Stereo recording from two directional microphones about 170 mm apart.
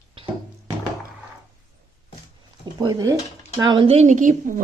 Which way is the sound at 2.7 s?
20° right (ahead or behind).